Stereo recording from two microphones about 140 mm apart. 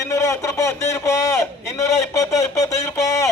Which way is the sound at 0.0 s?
20° left (ahead or behind).